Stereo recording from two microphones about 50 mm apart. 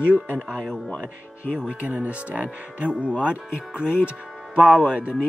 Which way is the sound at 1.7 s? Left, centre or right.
Right.